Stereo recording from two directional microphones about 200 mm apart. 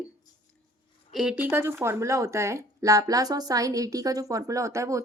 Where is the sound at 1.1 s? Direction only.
5° right (ahead or behind).